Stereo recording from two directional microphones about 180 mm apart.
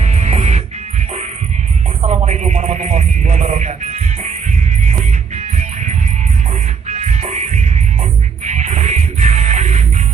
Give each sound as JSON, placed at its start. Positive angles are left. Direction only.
{"t": 0.0, "sound": "music", "side_deg": -40}
{"t": 2.0, "sound": "music", "side_deg": -40}
{"t": 6.9, "sound": "music", "side_deg": -40}